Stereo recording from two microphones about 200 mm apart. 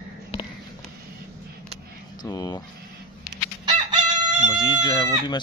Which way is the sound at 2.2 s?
20° left (ahead or behind).